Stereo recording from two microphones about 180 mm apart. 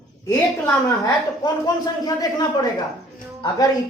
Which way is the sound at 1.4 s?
20° left (ahead or behind).